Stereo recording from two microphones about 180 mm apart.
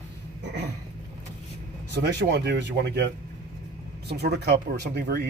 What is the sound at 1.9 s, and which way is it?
Speech, 70° right (ahead or behind).